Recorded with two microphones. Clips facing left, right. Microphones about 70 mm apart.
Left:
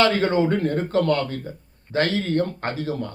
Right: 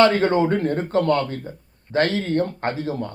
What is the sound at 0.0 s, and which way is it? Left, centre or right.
Speech, right.